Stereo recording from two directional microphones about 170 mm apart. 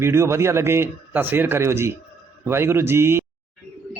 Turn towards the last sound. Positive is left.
turn(degrees=-15)  # may be behind; listen again after turning